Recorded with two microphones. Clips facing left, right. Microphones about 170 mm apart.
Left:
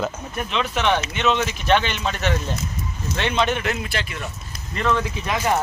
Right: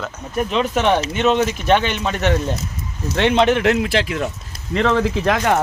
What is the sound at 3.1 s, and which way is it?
Speech, 70° right (ahead or behind).